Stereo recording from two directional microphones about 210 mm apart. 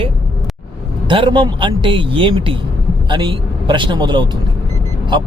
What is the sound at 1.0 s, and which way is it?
Speech, 25° right (ahead or behind).